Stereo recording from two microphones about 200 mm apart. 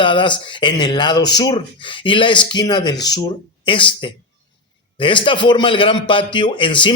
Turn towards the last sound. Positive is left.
turn(degrees=25)  # may be behind; listen again after turning